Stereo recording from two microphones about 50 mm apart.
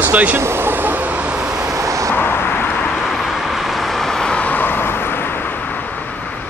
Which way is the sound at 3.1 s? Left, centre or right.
Centre.